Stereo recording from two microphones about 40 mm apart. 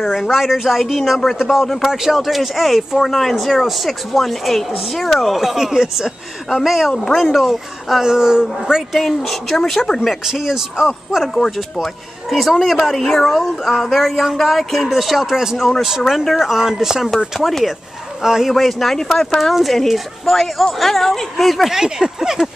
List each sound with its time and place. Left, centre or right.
0.0 s speech: centre
8.0 s a man's voice: centre
8.9 s speech: centre
10.2 s a man's voice: centre
11.8 s a man's voice: centre
17.4 s speech: centre
18.2 s a man's voice: centre
18.5 s speech: centre
21.7 s a man's voice: centre